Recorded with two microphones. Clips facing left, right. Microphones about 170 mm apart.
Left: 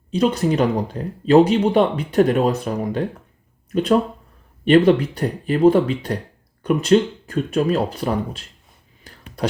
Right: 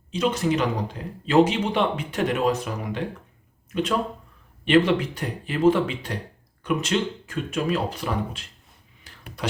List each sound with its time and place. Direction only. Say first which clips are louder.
0.2 s speech: left 5 dB; 35° left (ahead or behind)
4.6 s speech: left 5 dB; 40° left (ahead or behind)